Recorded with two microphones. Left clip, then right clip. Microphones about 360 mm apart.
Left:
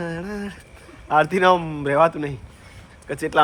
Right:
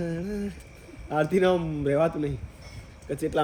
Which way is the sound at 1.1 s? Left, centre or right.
Centre.